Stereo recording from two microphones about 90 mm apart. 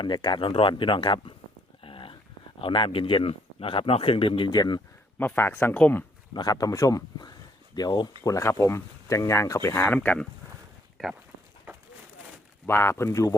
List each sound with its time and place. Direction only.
0.0 s speech: 55° left (ahead or behind)
0.4 s speech: 80° left
1.8 s a sound: 80° left
2.6 s speech: 75° left (ahead or behind); by 4.8 s 50° left (ahead or behind)
5.2 s speech: 20° left (ahead or behind)
6.3 s speech: 50° left (ahead or behind)
8.2 s speech: 35° left (ahead or behind); by 10.2 s 15° left (ahead or behind)
11.0 s speech: centre (ahead or behind)
12.6 s speech: 30° left (ahead or behind)